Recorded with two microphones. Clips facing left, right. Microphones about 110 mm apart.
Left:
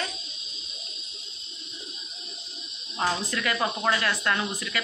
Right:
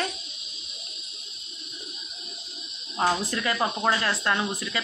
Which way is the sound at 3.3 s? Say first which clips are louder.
Right 1 dB; 25° right (ahead or behind).